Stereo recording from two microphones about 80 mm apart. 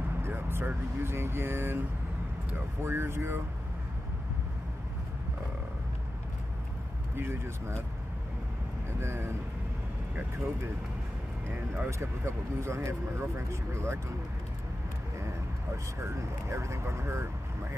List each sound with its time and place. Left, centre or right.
0.2 s speech: right
7.2 s speech: right
9.0 s speech: right
11.7 s speech: right
16.0 s speech: right